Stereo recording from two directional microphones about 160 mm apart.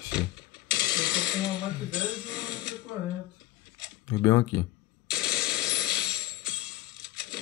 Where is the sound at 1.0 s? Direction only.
5° right (ahead or behind).